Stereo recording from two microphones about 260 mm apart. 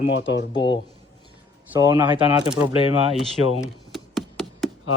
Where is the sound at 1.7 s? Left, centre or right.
Centre.